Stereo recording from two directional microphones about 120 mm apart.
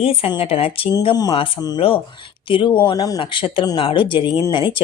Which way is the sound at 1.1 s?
35° left (ahead or behind).